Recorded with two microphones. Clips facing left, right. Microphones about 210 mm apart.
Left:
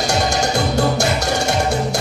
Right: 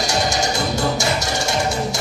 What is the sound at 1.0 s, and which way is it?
Music, 60° left (ahead or behind).